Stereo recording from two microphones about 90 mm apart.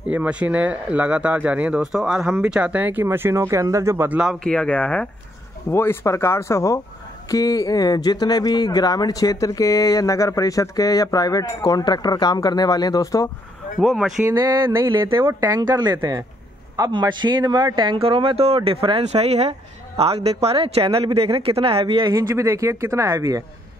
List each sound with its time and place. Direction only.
0.0 s speech: 15° right (ahead or behind); by 4.1 s 30° right (ahead or behind)
4.3 s speech: 10° left (ahead or behind)
5.7 s speech: 25° left (ahead or behind)
13.7 s speech: centre (ahead or behind)
14.2 s a woman's voice: 30° right (ahead or behind)
15.4 s speech: 45° right (ahead or behind)
17.0 s speech: 55° right (ahead or behind); by 22.1 s 70° right (ahead or behind)
22.3 s speech: 35° right (ahead or behind)